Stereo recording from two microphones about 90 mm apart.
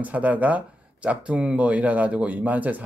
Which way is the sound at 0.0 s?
15° right (ahead or behind).